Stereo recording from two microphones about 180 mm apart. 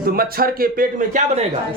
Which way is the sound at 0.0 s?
55° right (ahead or behind).